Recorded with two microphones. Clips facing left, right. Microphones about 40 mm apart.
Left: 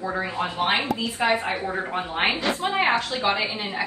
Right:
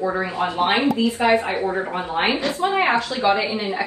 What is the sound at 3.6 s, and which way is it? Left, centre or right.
Speech, centre.